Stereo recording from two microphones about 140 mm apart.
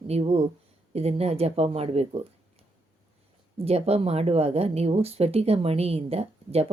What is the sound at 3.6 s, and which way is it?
A woman's voice, 45° right (ahead or behind).